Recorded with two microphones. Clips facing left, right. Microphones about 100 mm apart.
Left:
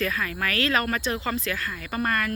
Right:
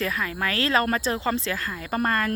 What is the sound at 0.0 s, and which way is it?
Speech, 25° right (ahead or behind).